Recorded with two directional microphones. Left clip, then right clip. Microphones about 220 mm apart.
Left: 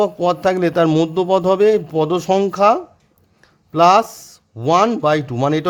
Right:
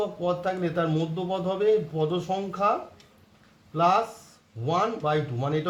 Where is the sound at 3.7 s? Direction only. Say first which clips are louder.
Left 11 dB; 45° left (ahead or behind).